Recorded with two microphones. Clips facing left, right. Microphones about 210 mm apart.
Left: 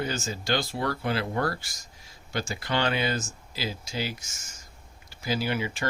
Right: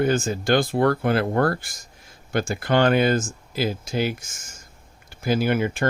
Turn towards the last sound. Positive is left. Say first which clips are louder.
# right 7 dB
turn(degrees=-50)  # may be behind; listen again after turning